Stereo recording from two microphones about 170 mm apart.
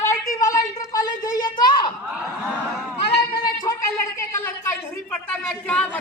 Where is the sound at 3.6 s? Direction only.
15° left (ahead or behind).